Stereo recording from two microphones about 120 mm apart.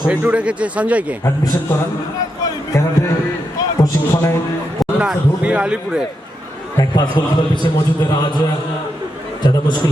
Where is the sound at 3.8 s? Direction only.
20° left (ahead or behind).